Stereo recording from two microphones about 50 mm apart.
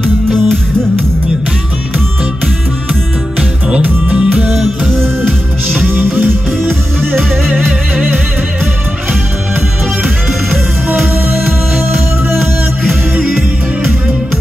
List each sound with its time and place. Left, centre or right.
3.3 s music: right
4.9 s music: right
13.2 s music: centre